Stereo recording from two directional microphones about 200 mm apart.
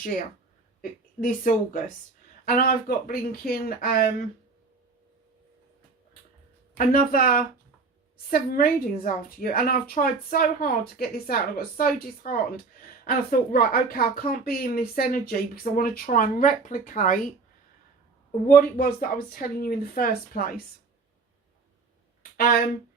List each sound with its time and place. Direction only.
0.8 s a woman's voice: 45° left (ahead or behind)
6.7 s speech: 45° left (ahead or behind)
18.4 s speech: 45° left (ahead or behind)
22.2 s a sound: 45° left (ahead or behind)